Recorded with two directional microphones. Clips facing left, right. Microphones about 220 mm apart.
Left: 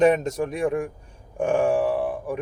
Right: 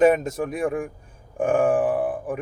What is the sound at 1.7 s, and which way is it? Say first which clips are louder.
Speech: right 1 dB; 50° right (ahead or behind).